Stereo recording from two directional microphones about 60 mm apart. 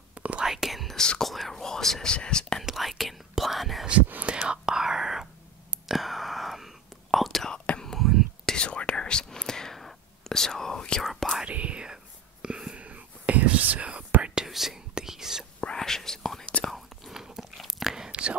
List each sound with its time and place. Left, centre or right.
0.1 s whispering: right
0.4 s whispering: centre
0.9 s speech: centre
1.3 s whispering: centre
2.1 s speech: centre
2.6 s whispering: centre
4.1 s whispering: right; by 7.5 s centre
7.5 s whispering: centre
7.8 s whispering: centre
8.5 s whispering: centre
11.4 s whispering: right
15.6 s whispering: centre
16.6 s chewing: centre